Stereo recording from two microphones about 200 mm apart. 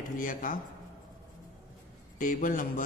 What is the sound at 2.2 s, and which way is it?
Speech, 40° left (ahead or behind).